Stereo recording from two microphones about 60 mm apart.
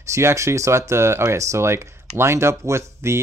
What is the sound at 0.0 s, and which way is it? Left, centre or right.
Speech, right.